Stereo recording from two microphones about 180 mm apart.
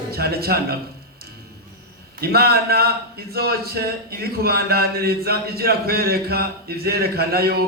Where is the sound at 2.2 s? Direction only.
60° right (ahead or behind).